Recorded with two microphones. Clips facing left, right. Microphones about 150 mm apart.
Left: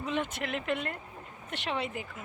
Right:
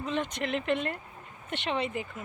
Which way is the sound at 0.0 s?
10° left (ahead or behind).